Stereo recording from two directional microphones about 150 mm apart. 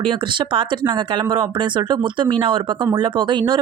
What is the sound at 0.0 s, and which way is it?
Speech, 35° right (ahead or behind).